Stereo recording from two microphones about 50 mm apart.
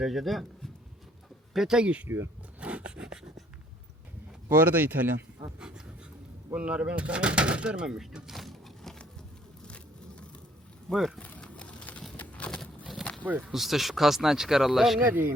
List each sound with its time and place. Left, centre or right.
0.0 s speech: centre
1.8 s speech: right
2.0 s speech: right
2.6 s a sound: right
4.5 s speech: right
5.5 s dog: centre
6.5 s speech: right
7.9 s keys jangling: centre
9.6 s vehicle: left
10.8 s speech: centre
11.2 s a sound: left
12.1 s a sound: left
13.0 s a sound: centre
13.5 s speech: centre